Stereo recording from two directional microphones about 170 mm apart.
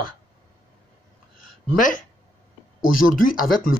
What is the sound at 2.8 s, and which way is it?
Speech, 55° left (ahead or behind).